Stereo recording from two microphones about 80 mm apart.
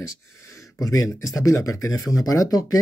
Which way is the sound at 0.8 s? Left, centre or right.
Left.